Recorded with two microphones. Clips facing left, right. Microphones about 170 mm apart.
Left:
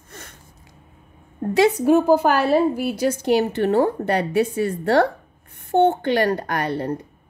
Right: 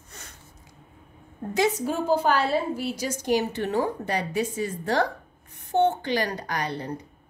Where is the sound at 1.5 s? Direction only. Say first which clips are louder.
Left 9 dB; 65° left (ahead or behind).